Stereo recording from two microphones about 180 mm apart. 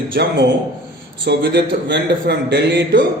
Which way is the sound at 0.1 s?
65° right (ahead or behind).